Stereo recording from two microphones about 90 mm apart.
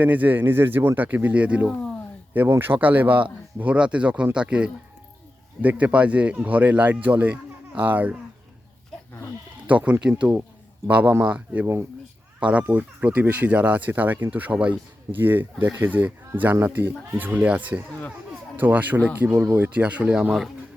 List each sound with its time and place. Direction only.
0.0 s speech: 20° right (ahead or behind)
9.6 s speech: 15° right (ahead or behind)
11.6 s speech: 25° right (ahead or behind)
12.4 s speech: 15° right (ahead or behind)